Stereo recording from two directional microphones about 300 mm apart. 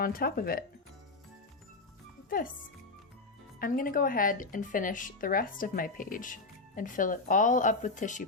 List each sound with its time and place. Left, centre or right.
0.0 s a woman's voice: left
3.6 s a woman's voice: left